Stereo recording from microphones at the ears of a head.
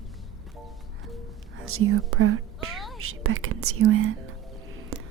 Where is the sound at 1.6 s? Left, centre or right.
Right.